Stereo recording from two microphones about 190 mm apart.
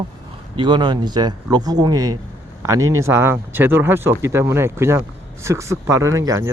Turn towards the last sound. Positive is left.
turn(degrees=-15)  # may be behind; listen again after turning